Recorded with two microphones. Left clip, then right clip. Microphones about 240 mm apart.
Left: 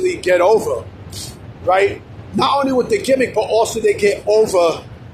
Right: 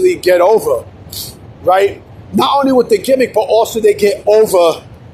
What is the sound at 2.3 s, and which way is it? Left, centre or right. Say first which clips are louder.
A man's voice: right 5 dB; right.